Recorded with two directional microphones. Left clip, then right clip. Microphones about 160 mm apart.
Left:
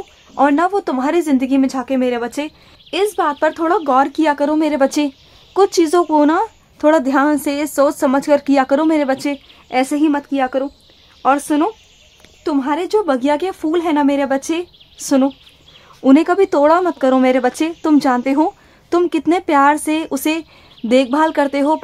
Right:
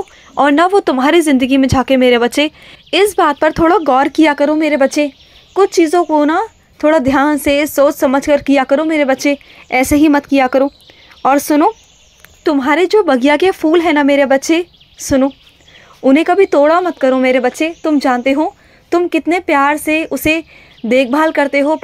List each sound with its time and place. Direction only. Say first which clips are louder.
0.3 s speech: right 4 dB; 25° right (ahead or behind)
15.0 s speech: right 2 dB; 5° right (ahead or behind)